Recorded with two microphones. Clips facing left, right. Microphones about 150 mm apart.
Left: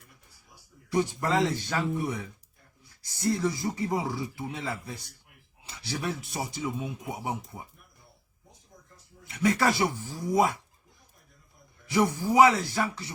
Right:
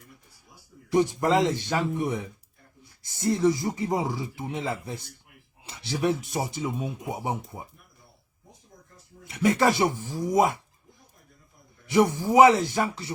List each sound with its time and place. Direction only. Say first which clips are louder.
0.9 s speech: right 5 dB; 20° right (ahead or behind)
9.3 s speech: right 3 dB; 25° right (ahead or behind)
11.9 s speech: right 4 dB; 20° right (ahead or behind)